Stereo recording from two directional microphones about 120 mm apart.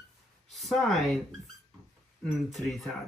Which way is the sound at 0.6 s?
5° left (ahead or behind).